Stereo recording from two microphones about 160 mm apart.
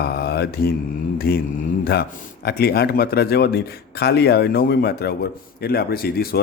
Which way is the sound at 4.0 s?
90° left.